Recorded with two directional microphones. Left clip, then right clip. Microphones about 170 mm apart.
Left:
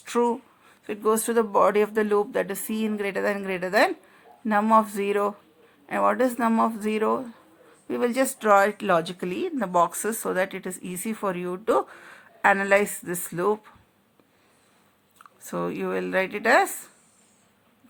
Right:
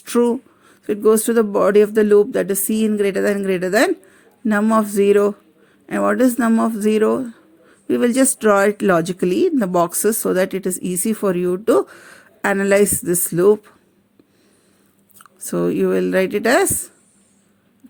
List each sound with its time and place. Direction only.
0.0 s speech: 40° right (ahead or behind)
15.2 s speech: 50° right (ahead or behind)